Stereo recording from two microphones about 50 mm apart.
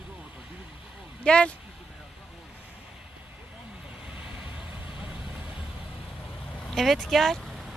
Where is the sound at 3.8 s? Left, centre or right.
Right.